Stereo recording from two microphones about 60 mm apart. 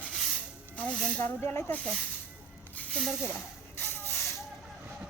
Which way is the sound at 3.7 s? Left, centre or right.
Left.